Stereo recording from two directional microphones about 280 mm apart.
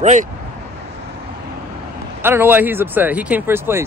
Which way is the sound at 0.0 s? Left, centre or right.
Right.